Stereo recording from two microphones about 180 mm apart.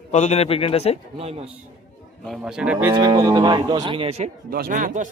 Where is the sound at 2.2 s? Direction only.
Centre (ahead or behind).